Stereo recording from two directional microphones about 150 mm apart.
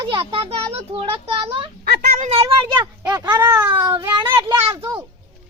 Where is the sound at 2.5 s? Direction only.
30° right (ahead or behind).